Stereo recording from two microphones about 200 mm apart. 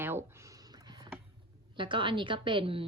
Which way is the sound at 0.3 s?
15° right (ahead or behind).